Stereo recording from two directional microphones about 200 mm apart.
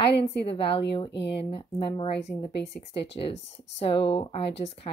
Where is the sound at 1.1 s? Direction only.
60° left (ahead or behind).